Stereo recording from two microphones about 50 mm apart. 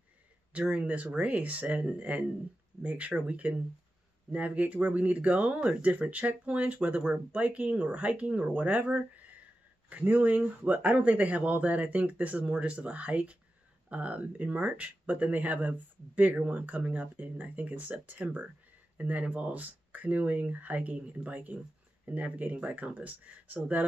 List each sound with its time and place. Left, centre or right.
0.5 s speech: right